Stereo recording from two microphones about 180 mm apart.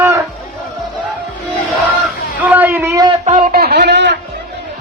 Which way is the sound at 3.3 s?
45° right (ahead or behind).